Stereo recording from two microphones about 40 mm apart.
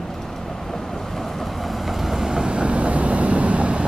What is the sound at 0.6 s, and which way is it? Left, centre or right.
Vehicle, centre.